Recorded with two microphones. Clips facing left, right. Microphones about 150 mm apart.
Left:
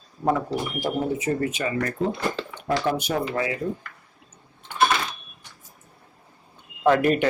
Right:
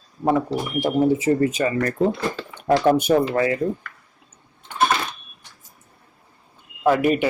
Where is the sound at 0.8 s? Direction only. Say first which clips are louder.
Right 9 dB; 30° right (ahead or behind).